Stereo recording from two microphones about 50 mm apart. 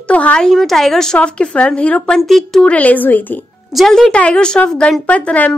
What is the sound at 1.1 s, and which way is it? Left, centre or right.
A woman's voice, left.